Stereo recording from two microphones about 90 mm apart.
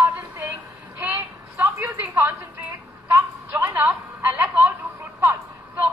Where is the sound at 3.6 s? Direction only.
20° right (ahead or behind).